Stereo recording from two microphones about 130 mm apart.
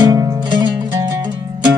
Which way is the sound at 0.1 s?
30° right (ahead or behind).